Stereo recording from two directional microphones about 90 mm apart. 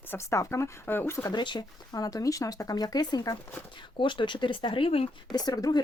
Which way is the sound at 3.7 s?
65° left (ahead or behind).